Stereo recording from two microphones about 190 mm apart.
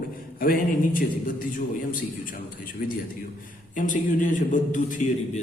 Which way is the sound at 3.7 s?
45° left (ahead or behind).